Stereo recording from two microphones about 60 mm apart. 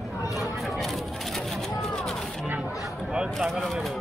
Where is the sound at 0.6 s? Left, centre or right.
Centre.